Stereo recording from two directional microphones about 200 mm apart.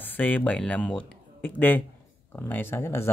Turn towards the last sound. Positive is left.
turn(degrees=10)  # may be behind; listen again after turning